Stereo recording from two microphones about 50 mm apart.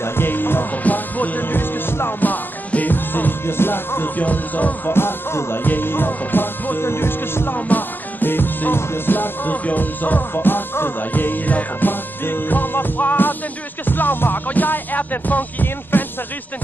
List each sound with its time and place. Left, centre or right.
0.0 s music: left
2.2 s music: left
4.2 s music: left
4.8 s music: left